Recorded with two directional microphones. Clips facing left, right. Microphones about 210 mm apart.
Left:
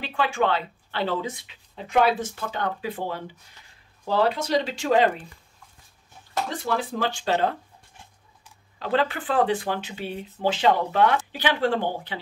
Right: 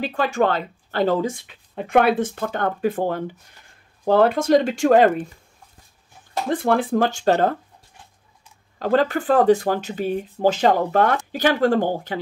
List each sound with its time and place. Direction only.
0.0 s speech: 40° right (ahead or behind)
6.5 s speech: 55° right (ahead or behind)
8.7 s speech: 45° right (ahead or behind)